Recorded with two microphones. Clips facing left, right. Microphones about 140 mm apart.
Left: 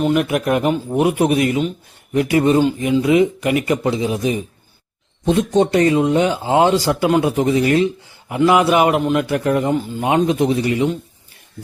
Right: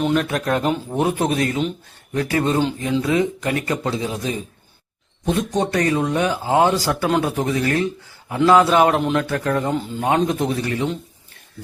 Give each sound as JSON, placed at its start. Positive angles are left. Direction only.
{"t": 0.1, "sound": "a man's voice", "side_deg": 15}
{"t": 9.2, "sound": "speech", "side_deg": 15}